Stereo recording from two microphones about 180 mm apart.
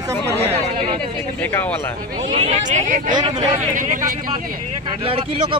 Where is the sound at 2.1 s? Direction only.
30° right (ahead or behind).